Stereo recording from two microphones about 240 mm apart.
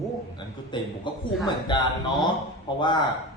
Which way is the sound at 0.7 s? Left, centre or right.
Centre.